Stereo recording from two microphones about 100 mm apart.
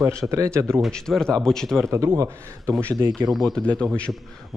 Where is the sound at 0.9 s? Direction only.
5° left (ahead or behind).